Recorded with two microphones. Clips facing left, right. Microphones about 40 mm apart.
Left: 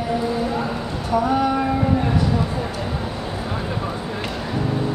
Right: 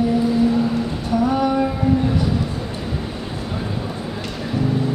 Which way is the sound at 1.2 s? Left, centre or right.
Centre.